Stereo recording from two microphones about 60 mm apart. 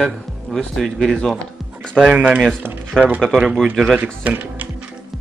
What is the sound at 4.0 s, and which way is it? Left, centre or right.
Speech, right.